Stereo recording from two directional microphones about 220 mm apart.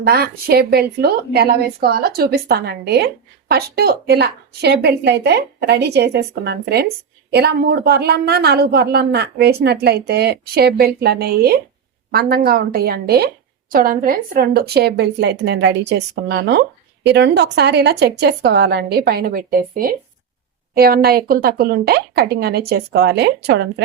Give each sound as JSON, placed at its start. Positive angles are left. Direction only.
{"t": 0.0, "sound": "a woman's voice", "side_deg": -45}